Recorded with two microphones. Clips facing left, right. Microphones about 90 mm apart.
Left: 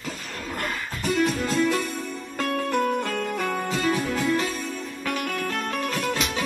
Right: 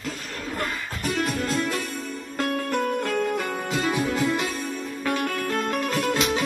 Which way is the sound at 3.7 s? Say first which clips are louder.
Right 1 dB; 15° right (ahead or behind).